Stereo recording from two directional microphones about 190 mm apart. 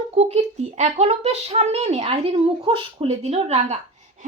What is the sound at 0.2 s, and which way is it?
A woman's voice, 35° right (ahead or behind).